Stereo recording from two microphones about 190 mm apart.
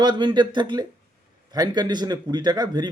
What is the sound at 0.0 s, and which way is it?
Speech, 25° right (ahead or behind).